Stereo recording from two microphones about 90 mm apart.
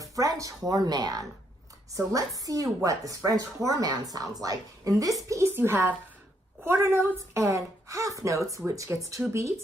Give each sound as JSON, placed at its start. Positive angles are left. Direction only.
{"t": 0.0, "sound": "a woman's voice", "side_deg": -40}
{"t": 7.4, "sound": "a woman's voice", "side_deg": -35}